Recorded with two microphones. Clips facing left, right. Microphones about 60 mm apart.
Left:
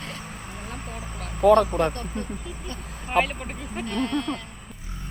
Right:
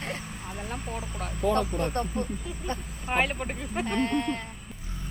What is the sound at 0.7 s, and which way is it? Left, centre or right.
Speech, centre.